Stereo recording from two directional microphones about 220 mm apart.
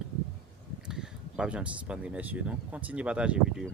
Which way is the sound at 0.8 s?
5° right (ahead or behind).